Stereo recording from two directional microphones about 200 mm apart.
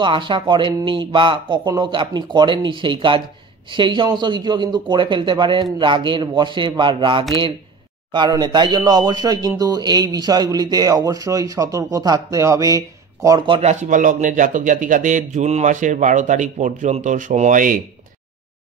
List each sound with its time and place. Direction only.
0.0 s speech: 25° right (ahead or behind); by 17.7 s 40° right (ahead or behind)